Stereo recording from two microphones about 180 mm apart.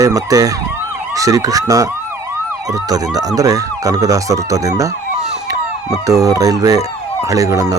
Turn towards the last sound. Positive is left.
turn(degrees=-20)  # may be behind; listen again after turning